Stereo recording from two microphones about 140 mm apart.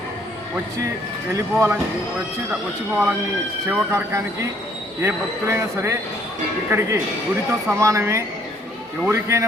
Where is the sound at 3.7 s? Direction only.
15° right (ahead or behind).